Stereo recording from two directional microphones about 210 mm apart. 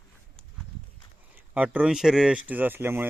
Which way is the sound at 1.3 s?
5° right (ahead or behind).